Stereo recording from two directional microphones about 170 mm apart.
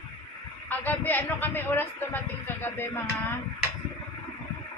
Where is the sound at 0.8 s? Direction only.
10° left (ahead or behind).